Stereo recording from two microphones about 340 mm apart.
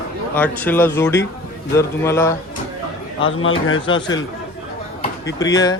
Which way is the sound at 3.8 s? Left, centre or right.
Centre.